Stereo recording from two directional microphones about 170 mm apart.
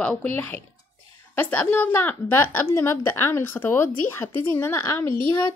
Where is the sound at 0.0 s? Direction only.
5° left (ahead or behind).